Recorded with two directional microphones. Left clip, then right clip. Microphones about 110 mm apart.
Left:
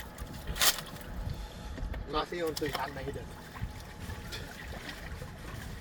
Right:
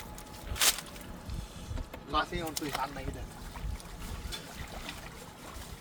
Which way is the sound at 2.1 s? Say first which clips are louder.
Right 1 dB; 50° right (ahead or behind).